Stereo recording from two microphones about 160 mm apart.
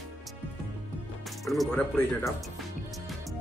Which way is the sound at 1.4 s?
Centre (ahead or behind).